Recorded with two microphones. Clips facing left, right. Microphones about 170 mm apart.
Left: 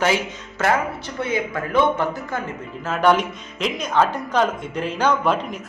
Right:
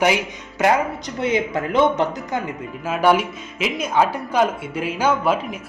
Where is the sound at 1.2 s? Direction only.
20° right (ahead or behind).